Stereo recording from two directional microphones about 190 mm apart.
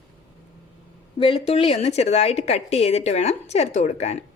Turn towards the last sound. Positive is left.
turn(degrees=40)  # may be behind; listen again after turning